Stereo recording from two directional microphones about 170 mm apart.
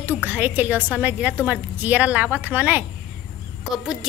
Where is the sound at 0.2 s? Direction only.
10° right (ahead or behind).